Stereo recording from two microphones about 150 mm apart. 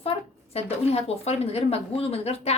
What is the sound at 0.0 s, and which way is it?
A woman's voice, 40° left (ahead or behind).